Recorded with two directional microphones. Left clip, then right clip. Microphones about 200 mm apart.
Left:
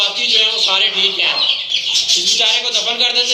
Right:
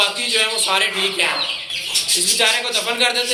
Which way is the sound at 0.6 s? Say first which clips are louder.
Left 4 dB; 25° right (ahead or behind).